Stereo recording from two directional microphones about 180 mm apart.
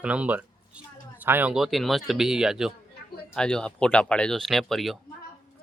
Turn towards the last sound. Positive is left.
turn(degrees=0)  # may be behind; listen again after turning